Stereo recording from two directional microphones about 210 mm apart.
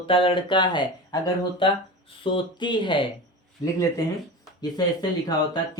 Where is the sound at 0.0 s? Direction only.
25° left (ahead or behind).